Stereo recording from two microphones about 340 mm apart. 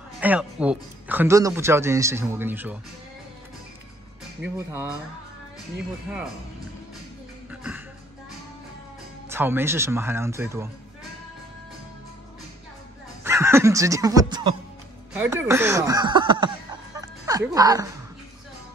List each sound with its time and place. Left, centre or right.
0.2 s speech: centre
4.4 s speech: right
9.3 s speech: centre
13.2 s speech: centre